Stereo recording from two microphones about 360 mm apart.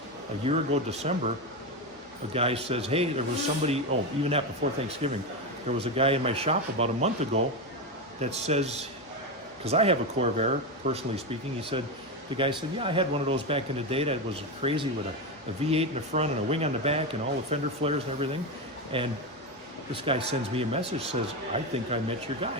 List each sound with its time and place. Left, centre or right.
0.4 s speech: centre
2.3 s speech: centre